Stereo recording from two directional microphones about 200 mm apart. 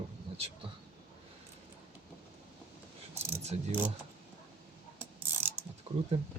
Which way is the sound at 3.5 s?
35° right (ahead or behind).